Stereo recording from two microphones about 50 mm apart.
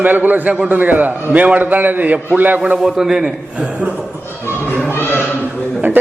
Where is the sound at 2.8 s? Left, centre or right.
Centre.